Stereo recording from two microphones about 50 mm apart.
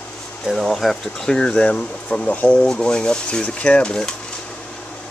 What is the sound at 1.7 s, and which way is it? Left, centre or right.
Speech, left.